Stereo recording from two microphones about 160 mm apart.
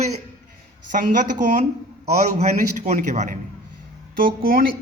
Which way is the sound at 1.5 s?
50° right (ahead or behind).